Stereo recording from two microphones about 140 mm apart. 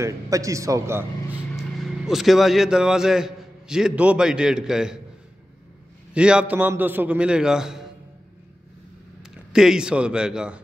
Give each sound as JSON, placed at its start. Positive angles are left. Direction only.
{"t": 0.0, "sound": "speech", "side_deg": -25}
{"t": 1.6, "sound": "a man's voice", "side_deg": 0}
{"t": 6.1, "sound": "a man's voice", "side_deg": -5}
{"t": 9.2, "sound": "a man's voice", "side_deg": -5}